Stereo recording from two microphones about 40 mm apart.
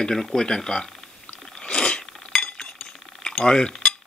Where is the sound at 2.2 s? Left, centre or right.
Left.